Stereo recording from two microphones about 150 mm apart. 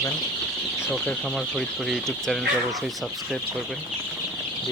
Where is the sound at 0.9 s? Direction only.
5° left (ahead or behind).